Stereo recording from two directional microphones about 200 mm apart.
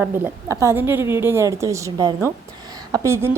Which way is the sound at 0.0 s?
15° right (ahead or behind).